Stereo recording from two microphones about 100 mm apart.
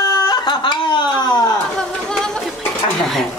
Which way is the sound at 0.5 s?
45° left (ahead or behind).